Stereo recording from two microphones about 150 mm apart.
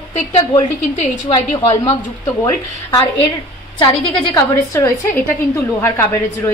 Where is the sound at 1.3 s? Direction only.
40° left (ahead or behind).